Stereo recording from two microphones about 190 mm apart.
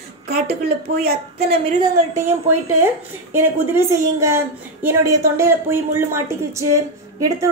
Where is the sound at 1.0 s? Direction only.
55° right (ahead or behind).